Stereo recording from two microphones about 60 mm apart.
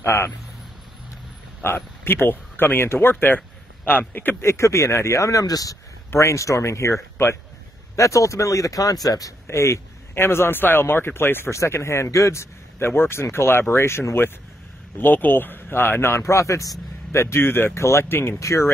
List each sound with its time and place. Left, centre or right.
0.0 s speech: left
1.6 s speech: left
4.4 s speech: left
6.0 s speech: left
7.9 s speech: left
9.5 s speech: left
17.1 s speech: left
17.7 s speech: left
18.4 s speech: left